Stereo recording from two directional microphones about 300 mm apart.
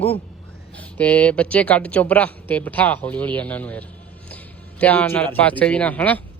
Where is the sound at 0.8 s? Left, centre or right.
Centre.